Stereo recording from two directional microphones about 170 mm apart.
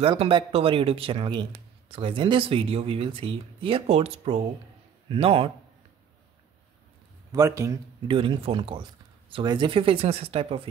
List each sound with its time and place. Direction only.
0.0 s speech: 30° right (ahead or behind)
7.3 s a man's voice: 20° right (ahead or behind)
8.1 s speech: 30° right (ahead or behind)